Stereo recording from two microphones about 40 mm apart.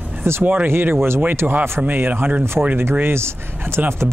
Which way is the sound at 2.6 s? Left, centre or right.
Right.